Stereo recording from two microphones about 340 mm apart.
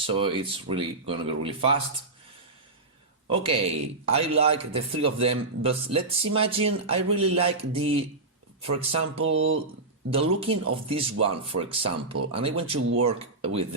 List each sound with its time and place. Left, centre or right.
0.0 s a man's voice: centre
3.2 s a man's voice: centre